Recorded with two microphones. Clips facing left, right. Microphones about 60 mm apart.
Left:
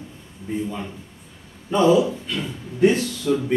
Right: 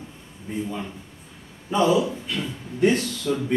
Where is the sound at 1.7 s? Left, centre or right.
Centre.